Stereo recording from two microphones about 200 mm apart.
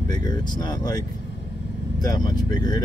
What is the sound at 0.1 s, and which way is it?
Speech, 20° left (ahead or behind).